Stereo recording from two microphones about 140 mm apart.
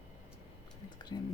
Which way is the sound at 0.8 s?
30° left (ahead or behind).